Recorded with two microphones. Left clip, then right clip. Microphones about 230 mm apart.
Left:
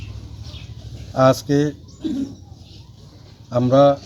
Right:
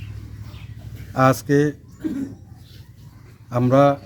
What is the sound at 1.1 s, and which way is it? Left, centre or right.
Speech, centre.